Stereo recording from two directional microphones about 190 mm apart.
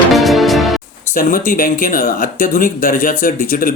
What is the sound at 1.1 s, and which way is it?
Speech, 45° left (ahead or behind).